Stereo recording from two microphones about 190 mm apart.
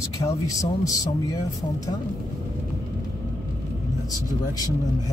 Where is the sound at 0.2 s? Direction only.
15° left (ahead or behind).